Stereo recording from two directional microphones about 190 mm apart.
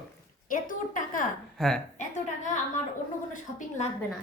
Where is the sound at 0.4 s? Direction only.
45° left (ahead or behind).